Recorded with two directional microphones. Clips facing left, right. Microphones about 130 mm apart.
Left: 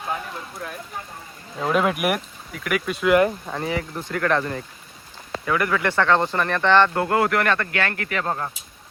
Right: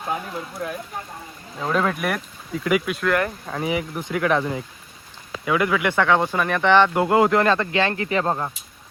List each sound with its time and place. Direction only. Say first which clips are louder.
1.5 s speech: left 1 dB; 5° left (ahead or behind)
2.5 s speech: right 4 dB; 20° right (ahead or behind)
2.8 s speech: left 4 dB; centre (ahead or behind)
3.7 s speech: right 3 dB; 15° right (ahead or behind)